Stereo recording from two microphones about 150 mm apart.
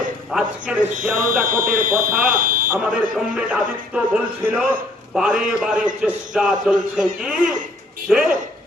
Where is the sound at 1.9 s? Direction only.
10° right (ahead or behind).